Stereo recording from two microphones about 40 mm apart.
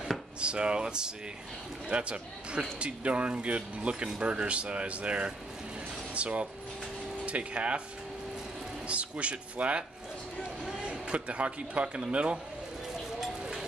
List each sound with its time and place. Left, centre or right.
0.4 s speech: right
8.8 s speech: right
10.9 s speech: right
13.2 s a sound: centre